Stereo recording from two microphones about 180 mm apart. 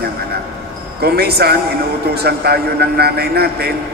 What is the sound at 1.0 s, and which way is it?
A man's voice, 60° right (ahead or behind).